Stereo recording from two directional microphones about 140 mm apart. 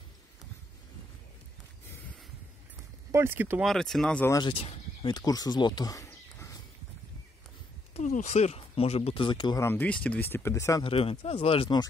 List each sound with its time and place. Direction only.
3.1 s speech: 15° right (ahead or behind)
3.6 s speech: 5° left (ahead or behind)
4.3 s speech: 35° left (ahead or behind)
7.9 s speech: 65° left (ahead or behind); by 9.7 s 30° left (ahead or behind)
9.7 s speech: 10° left (ahead or behind)
10.8 s speech: 40° left (ahead or behind)